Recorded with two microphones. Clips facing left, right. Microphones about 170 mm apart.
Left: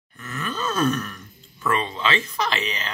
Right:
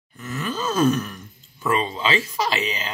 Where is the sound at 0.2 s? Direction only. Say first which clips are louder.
Right 2 dB; 5° right (ahead or behind).